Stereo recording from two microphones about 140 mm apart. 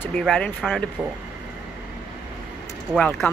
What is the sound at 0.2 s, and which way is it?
Speech, 10° left (ahead or behind).